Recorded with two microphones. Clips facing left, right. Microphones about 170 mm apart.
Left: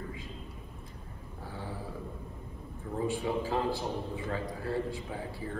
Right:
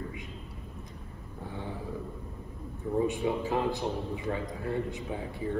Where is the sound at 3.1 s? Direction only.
20° right (ahead or behind).